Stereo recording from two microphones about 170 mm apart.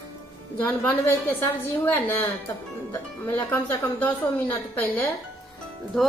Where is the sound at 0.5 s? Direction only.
10° left (ahead or behind).